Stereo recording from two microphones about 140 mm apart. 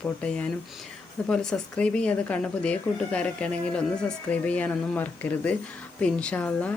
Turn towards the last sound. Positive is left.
turn(degrees=10)  # may be behind; listen again after turning